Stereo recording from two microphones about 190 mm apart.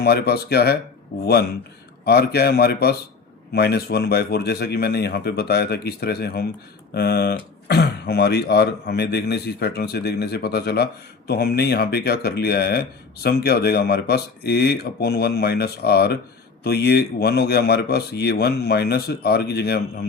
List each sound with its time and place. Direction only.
0.0 s speech: 55° left (ahead or behind)
2.0 s speech: 55° left (ahead or behind)